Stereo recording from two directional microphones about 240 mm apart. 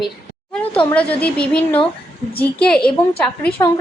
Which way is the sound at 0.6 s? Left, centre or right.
Left.